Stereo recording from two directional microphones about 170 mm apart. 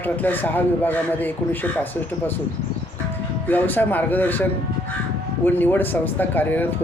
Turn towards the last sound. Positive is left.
turn(degrees=10)  # may be behind; listen again after turning